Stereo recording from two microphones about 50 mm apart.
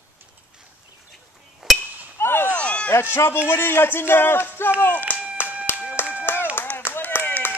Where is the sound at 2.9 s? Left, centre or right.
Left.